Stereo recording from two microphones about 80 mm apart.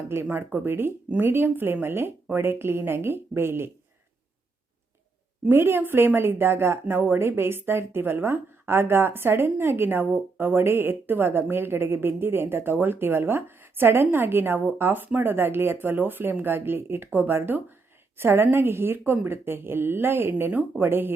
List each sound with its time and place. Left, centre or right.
0.1 s speech: right
5.5 s speech: right
20.5 s speech: centre